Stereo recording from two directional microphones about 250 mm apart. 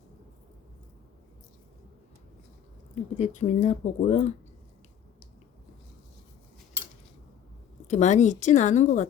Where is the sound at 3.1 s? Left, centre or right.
Left.